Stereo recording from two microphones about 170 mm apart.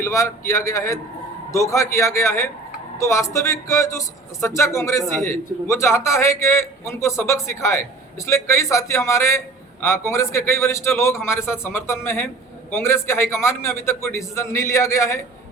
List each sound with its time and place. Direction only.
0.0 s speech: 15° left (ahead or behind)